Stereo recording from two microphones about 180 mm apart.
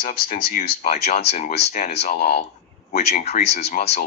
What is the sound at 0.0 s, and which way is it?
Speech, 50° left (ahead or behind).